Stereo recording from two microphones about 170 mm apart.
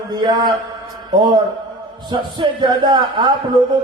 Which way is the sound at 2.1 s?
25° right (ahead or behind).